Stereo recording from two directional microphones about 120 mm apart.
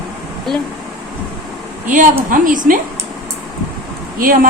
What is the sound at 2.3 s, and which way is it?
Speech, 90° right.